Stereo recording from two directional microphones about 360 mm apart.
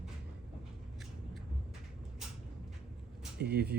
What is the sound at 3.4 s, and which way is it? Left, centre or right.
Speech, right.